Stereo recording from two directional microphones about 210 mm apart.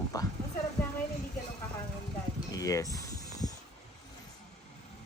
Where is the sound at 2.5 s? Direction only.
15° left (ahead or behind).